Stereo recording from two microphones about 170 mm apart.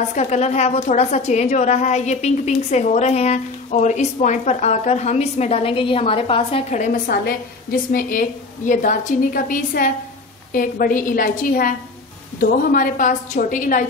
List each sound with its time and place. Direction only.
0.1 s a woman's voice: 40° left (ahead or behind)
7.1 s a woman's voice: 60° left (ahead or behind)